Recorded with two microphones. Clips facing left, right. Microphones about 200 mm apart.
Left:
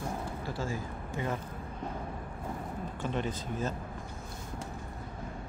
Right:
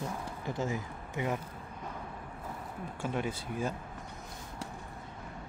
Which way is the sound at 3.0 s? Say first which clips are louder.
Even; 10° right (ahead or behind).